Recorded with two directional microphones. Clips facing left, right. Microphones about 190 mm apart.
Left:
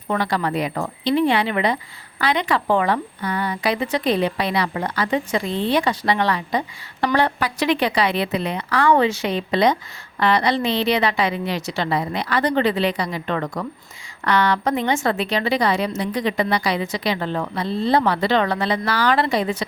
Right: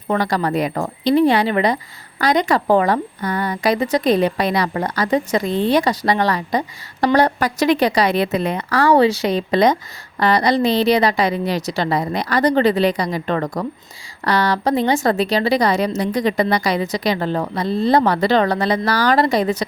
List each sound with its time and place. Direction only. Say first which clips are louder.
0.1 s speech: right 3 dB; 40° right (ahead or behind)